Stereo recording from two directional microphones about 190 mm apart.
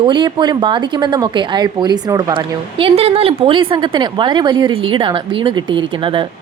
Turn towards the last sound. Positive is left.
turn(degrees=-25)  # may be behind; listen again after turning